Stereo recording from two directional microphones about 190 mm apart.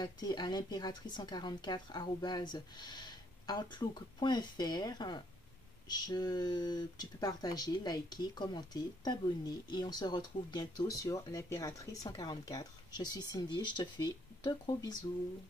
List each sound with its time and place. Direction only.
0.0 s speech: 20° left (ahead or behind)